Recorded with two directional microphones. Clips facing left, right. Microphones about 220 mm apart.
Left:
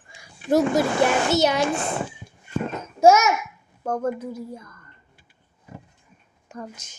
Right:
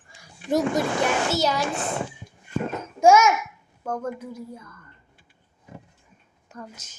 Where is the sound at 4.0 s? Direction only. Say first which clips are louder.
Left 5 dB; 35° left (ahead or behind).